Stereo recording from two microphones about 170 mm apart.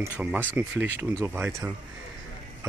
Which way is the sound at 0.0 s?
10° right (ahead or behind).